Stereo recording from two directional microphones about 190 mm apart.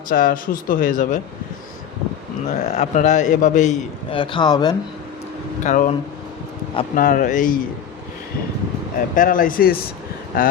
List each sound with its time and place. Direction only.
0.1 s a man's voice: 50° left (ahead or behind)
2.5 s a man's voice: 40° left (ahead or behind)
4.1 s speech: 25° left (ahead or behind)
5.6 s a man's voice: 45° left (ahead or behind)
6.9 s a man's voice: 45° left (ahead or behind)
9.1 s a man's voice: 45° left (ahead or behind)